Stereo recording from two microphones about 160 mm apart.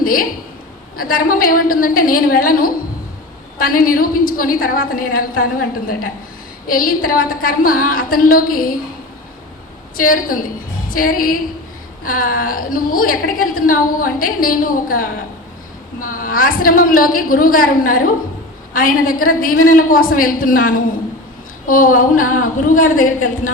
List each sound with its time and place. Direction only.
0.0 s a woman's voice: 65° left (ahead or behind)
10.0 s a woman's voice: 60° left (ahead or behind)